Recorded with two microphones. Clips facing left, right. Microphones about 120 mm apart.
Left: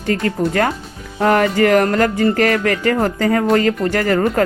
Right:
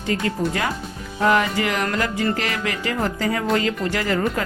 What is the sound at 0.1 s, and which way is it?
Speech, 55° left (ahead or behind).